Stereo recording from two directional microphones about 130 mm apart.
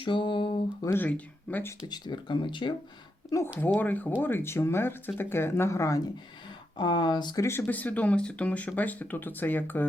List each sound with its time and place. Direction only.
0.0 s a sound: 40° left (ahead or behind)
0.8 s speech: 20° left (ahead or behind)
1.9 s speech: 35° left (ahead or behind)
3.3 s speech: 25° left (ahead or behind)
3.8 s speech: 15° left (ahead or behind)
6.7 s speech: 35° left (ahead or behind)
7.4 s speech: 15° left (ahead or behind)